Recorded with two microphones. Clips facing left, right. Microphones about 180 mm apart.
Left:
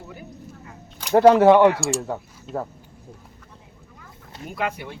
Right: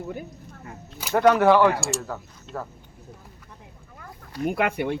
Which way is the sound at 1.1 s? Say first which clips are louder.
Left 4 dB; 30° left (ahead or behind).